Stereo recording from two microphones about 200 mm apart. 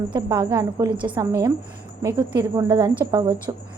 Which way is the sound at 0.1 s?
20° right (ahead or behind).